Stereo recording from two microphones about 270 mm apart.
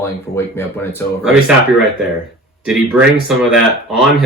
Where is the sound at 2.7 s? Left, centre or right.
Centre.